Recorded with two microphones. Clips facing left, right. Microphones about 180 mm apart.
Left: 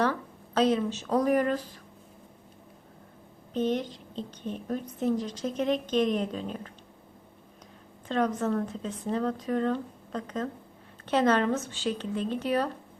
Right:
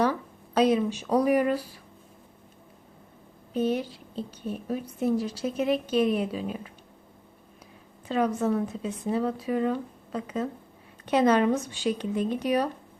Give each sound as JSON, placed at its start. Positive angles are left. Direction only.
{"t": 0.0, "sound": "speech", "side_deg": -10}
{"t": 3.5, "sound": "a woman's voice", "side_deg": -10}
{"t": 8.0, "sound": "a woman's voice", "side_deg": -10}